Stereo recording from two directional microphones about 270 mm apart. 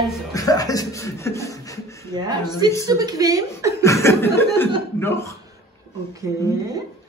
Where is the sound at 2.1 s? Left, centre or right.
Centre.